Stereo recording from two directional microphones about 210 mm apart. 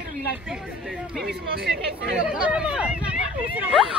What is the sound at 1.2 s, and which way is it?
Speech, 50° right (ahead or behind).